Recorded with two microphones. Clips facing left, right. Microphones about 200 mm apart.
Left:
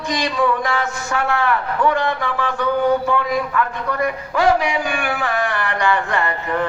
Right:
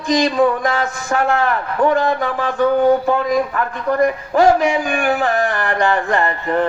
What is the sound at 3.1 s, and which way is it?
A man's voice, 40° right (ahead or behind).